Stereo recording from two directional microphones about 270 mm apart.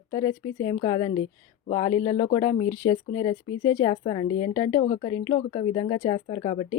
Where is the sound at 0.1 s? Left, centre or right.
Centre.